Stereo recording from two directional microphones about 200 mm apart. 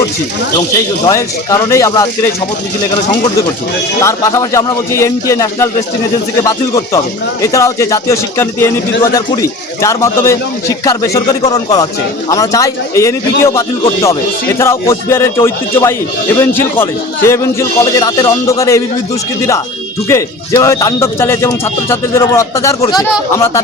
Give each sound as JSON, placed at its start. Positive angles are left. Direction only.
{"t": 1.0, "sound": "speech", "side_deg": 15}
{"t": 20.1, "sound": "speech", "side_deg": 15}